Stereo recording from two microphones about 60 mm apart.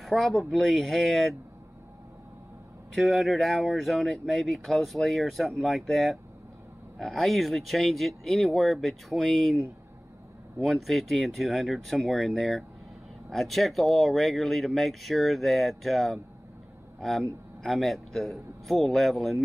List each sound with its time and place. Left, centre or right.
0.0 s speech: centre
2.9 s speech: centre
10.6 s speech: centre